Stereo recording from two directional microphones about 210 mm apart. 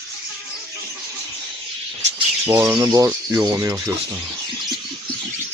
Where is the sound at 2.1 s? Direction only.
15° right (ahead or behind).